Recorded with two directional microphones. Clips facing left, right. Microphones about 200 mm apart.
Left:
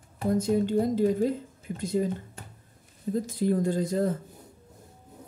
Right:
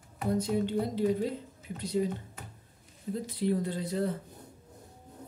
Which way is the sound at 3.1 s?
45° left (ahead or behind).